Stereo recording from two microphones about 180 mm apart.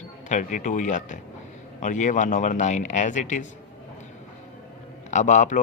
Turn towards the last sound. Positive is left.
turn(degrees=40)  # may be behind; listen again after turning